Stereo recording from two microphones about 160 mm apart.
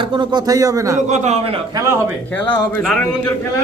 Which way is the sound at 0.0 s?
30° right (ahead or behind).